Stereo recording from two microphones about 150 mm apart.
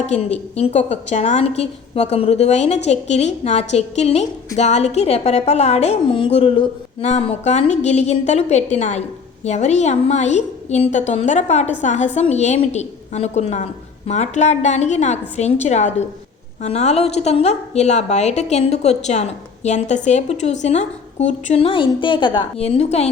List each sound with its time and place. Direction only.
0.1 s a woman's voice: 45° left (ahead or behind)